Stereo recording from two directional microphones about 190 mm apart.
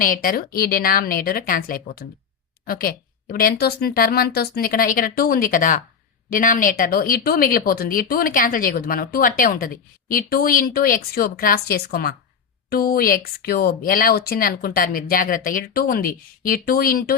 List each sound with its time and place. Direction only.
0.0 s a woman's voice: 45° left (ahead or behind)